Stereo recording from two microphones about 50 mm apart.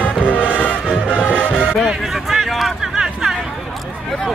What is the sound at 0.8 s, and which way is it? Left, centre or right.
Music, centre.